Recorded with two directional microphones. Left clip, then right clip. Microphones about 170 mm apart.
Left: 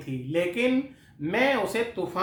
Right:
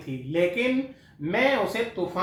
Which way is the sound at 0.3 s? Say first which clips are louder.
Right 1 dB; 35° left (ahead or behind).